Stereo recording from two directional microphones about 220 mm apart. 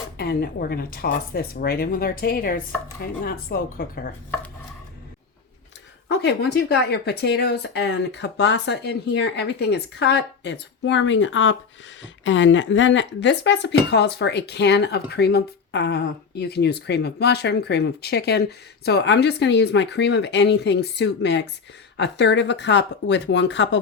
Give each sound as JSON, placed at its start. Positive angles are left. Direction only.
{"t": 0.2, "sound": "speech", "side_deg": 45}
{"t": 6.1, "sound": "speech", "side_deg": 50}